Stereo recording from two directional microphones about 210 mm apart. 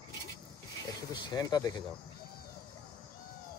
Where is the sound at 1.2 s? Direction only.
20° left (ahead or behind).